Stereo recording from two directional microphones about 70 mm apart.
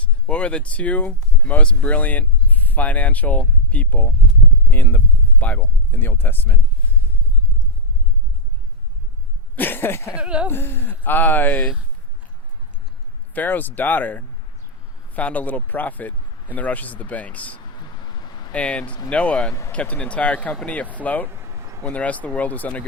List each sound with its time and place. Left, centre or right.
0.3 s speech: centre
9.6 s a sound: left
10.2 s speech: centre
10.5 s speech: left
13.3 s speech: left